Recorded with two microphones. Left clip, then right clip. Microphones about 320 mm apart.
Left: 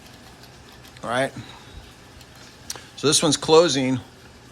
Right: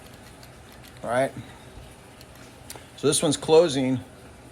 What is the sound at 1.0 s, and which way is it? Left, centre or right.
Speech, centre.